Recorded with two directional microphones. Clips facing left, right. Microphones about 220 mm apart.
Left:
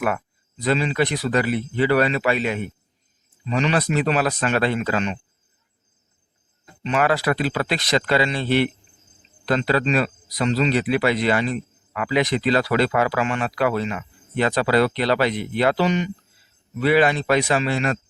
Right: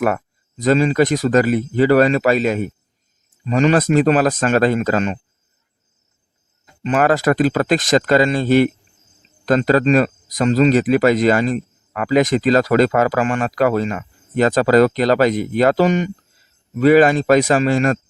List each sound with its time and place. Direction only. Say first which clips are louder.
0.0 s speech: right 5 dB; 40° right (ahead or behind)
6.8 s speech: right 5 dB; 45° right (ahead or behind)